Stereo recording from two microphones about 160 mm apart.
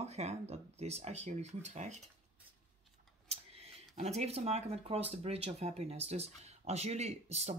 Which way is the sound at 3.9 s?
45° right (ahead or behind).